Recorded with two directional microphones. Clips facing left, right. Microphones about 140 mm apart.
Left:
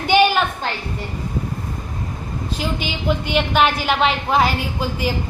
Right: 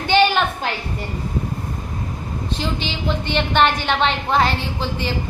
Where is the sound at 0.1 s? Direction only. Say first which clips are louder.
Left 1 dB; 10° left (ahead or behind).